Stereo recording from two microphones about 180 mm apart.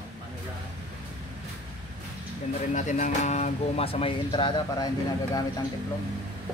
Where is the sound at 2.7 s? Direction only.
40° left (ahead or behind); by 4.9 s 25° left (ahead or behind).